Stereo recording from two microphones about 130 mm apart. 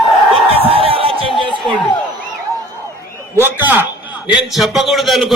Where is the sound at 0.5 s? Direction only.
50° right (ahead or behind).